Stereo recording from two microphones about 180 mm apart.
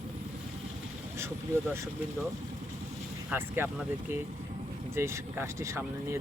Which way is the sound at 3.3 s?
10° right (ahead or behind).